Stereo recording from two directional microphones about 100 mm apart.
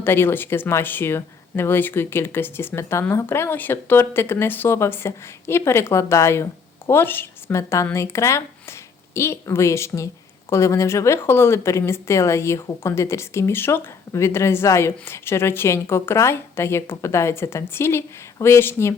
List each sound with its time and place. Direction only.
0.0 s speech: 25° left (ahead or behind)